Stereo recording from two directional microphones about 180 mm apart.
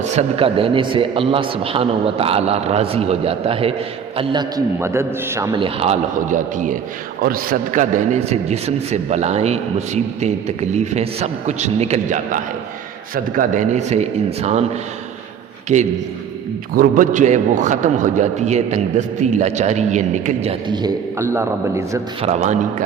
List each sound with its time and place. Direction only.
0.0 s a man's voice: 35° right (ahead or behind); by 5.5 s 15° right (ahead or behind)
5.5 s a man's voice: 30° right (ahead or behind)
6.3 s a man's voice: 45° right (ahead or behind)
16.7 s a man's voice: 50° right (ahead or behind); by 22.0 s 15° right (ahead or behind)
22.2 s a man's voice: 40° right (ahead or behind)